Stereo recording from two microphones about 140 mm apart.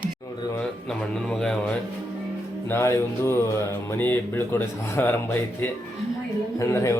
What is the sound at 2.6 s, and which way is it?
A man's voice, 20° left (ahead or behind).